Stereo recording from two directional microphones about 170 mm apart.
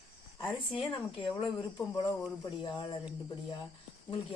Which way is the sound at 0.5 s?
30° left (ahead or behind).